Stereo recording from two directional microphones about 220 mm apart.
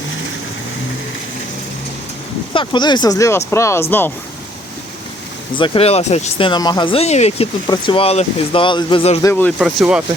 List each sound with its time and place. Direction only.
2.5 s speech: 20° left (ahead or behind)
5.5 s speech: 25° left (ahead or behind)
9.2 s speech: 5° left (ahead or behind)